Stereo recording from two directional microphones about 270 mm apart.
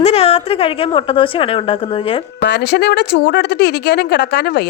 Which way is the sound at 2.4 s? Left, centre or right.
Left.